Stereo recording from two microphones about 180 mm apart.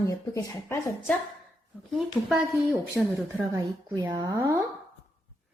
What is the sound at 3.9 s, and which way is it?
Speech, 25° right (ahead or behind).